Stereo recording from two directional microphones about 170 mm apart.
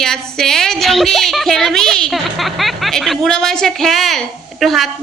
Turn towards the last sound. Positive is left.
turn(degrees=0)  # may be behind; listen again after turning